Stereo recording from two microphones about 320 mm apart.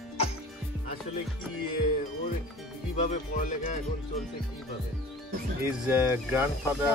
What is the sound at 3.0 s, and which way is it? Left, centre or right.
Music, left.